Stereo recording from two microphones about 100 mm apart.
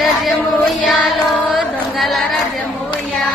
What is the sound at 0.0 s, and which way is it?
Female singing, centre (ahead or behind).